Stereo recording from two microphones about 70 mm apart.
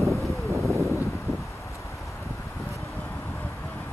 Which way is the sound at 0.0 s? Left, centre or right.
Right.